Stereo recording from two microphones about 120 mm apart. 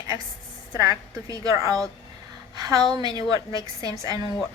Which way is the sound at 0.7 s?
25° right (ahead or behind).